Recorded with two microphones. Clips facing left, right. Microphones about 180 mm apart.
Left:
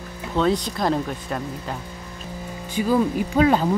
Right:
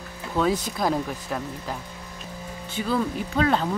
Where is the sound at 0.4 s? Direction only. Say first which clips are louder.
Left 2 dB; 5° right (ahead or behind).